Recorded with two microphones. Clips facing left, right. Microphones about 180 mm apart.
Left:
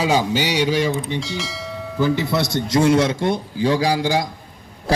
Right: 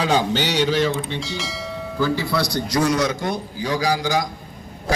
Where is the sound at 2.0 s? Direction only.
20° left (ahead or behind).